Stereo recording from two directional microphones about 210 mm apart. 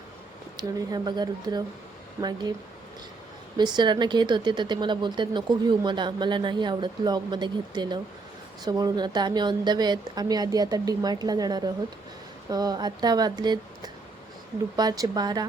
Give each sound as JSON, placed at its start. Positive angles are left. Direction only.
{"t": 0.5, "sound": "speech", "side_deg": -20}
{"t": 3.6, "sound": "speech", "side_deg": -20}